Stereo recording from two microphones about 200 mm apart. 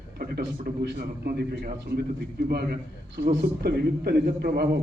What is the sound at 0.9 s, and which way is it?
A man's voice, 55° right (ahead or behind).